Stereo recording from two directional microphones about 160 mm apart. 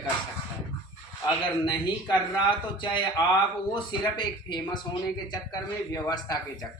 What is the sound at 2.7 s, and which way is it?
Speech, 30° left (ahead or behind).